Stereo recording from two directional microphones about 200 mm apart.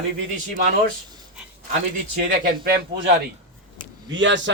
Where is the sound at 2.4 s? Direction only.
50° right (ahead or behind).